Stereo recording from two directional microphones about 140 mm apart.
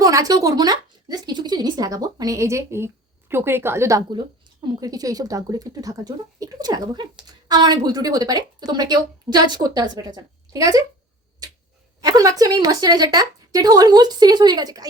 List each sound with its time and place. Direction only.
0.0 s a woman's voice: 25° right (ahead or behind)
12.0 s a woman's voice: 25° right (ahead or behind)